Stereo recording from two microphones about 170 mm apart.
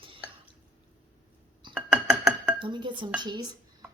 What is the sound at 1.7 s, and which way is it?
Glass, 5° right (ahead or behind).